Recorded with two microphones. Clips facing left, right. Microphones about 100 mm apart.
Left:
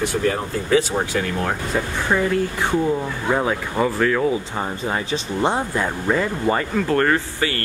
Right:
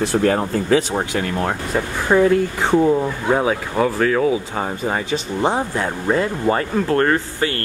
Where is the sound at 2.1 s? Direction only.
20° right (ahead or behind).